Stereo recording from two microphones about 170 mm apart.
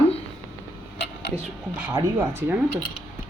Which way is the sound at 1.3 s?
10° right (ahead or behind).